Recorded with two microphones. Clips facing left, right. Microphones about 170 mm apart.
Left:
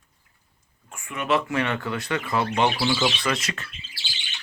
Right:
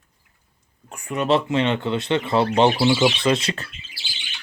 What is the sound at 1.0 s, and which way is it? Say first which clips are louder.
Speech: right 4 dB; 35° right (ahead or behind).